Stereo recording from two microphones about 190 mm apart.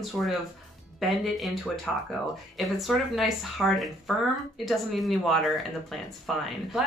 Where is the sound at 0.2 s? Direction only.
Centre (ahead or behind).